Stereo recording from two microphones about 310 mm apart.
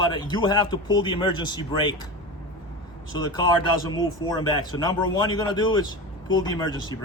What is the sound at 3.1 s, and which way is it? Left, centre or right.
A man's voice, centre.